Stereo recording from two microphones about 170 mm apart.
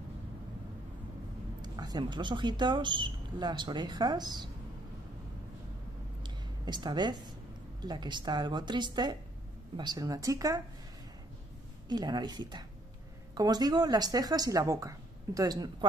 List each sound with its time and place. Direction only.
1.6 s speech: 25° right (ahead or behind)
6.2 s a sound: 25° right (ahead or behind)
7.8 s speech: 25° right (ahead or behind)
11.9 s speech: 25° right (ahead or behind)